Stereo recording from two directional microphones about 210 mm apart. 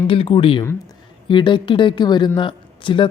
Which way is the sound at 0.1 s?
25° left (ahead or behind).